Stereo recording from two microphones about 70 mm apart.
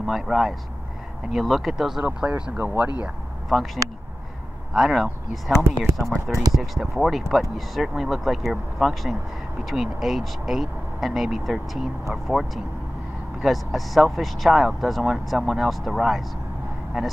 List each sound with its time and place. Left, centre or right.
0.0 s speech: centre; by 2.9 s right
3.4 s speech: centre